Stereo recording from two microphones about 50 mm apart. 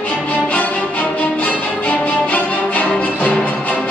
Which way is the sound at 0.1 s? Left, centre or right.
Left.